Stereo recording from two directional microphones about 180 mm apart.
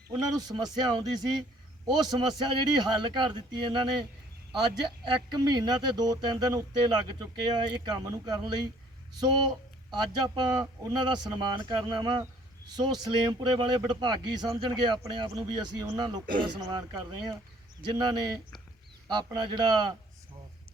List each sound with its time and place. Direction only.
0.1 s speech: 20° right (ahead or behind)
5.0 s speech: 25° right (ahead or behind)
9.9 s speech: 25° right (ahead or behind)